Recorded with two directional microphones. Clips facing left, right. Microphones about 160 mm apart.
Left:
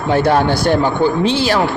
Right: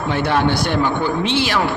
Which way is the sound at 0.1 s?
40° left (ahead or behind).